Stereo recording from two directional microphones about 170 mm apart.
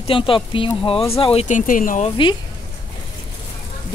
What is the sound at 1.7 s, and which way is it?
Speech, 50° left (ahead or behind).